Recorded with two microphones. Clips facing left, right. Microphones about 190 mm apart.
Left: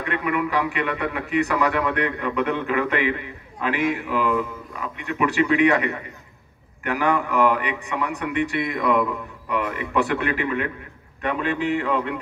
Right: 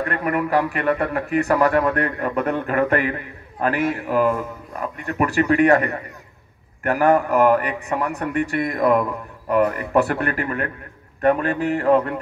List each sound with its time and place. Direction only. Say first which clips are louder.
0.0 s a man's voice: right 2 dB; 45° right (ahead or behind)